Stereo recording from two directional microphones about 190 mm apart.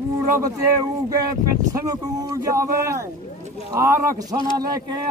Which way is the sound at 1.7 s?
20° right (ahead or behind).